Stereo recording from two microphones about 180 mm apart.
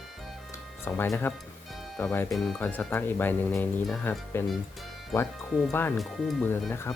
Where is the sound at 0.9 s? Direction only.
15° left (ahead or behind).